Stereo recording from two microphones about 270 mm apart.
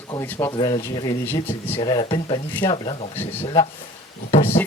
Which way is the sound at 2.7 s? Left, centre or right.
Centre.